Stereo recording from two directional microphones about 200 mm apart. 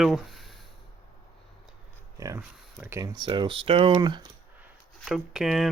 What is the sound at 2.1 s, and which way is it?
Speech, 15° right (ahead or behind).